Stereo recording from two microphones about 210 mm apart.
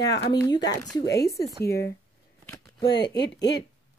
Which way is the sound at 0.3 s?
20° left (ahead or behind).